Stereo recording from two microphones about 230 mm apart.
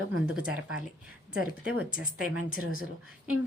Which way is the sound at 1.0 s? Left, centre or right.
Centre.